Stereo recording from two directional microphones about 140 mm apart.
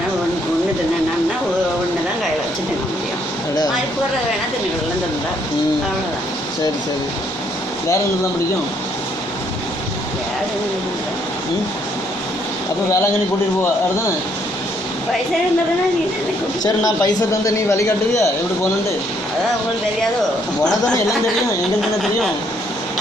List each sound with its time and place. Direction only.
16.6 s a man's voice: 25° left (ahead or behind)